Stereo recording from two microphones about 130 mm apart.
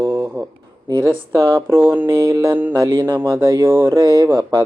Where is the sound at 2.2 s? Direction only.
25° right (ahead or behind).